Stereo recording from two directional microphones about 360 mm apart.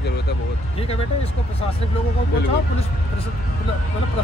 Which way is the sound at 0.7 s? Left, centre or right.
Centre.